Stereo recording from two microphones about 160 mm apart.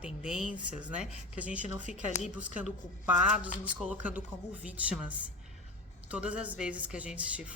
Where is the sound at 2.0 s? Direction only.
50° left (ahead or behind).